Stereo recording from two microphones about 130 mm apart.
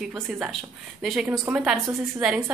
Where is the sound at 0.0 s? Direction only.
5° right (ahead or behind).